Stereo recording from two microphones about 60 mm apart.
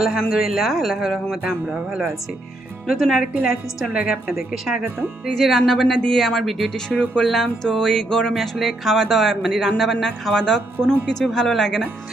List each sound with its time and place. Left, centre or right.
0.0 s speech: centre
3.9 s a woman's voice: centre
4.3 s speech: centre
6.8 s speech: centre
7.2 s speech: centre